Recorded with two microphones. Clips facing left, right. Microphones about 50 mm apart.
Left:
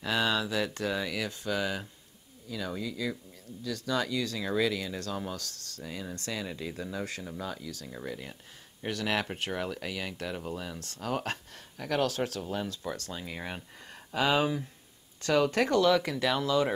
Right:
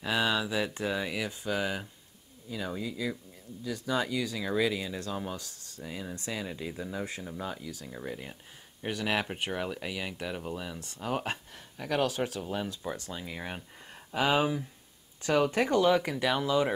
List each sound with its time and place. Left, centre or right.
0.0 s speech: centre
10.8 s speech: centre
13.1 s speech: centre
14.1 s speech: centre